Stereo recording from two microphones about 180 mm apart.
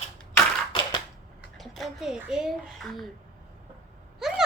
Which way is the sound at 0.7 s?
25° left (ahead or behind).